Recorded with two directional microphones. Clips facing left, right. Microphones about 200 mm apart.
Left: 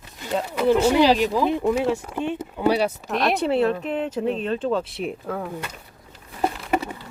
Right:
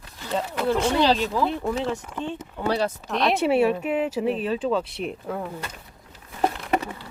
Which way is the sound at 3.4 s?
10° right (ahead or behind).